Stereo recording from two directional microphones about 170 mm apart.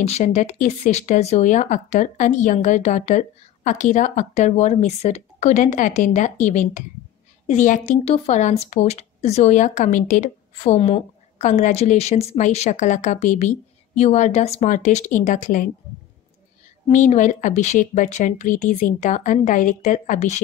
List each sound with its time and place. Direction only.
0.0 s a woman's voice: 40° left (ahead or behind)
16.9 s a woman's voice: 45° left (ahead or behind)